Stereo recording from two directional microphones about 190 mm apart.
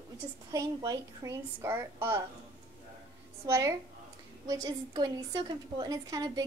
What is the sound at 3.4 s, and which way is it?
A woman's voice, 15° right (ahead or behind).